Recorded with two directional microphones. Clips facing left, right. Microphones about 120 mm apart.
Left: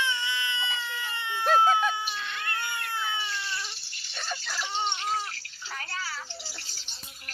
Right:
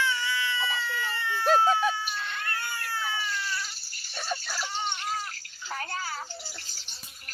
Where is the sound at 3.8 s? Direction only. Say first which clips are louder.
Even; 40° right (ahead or behind).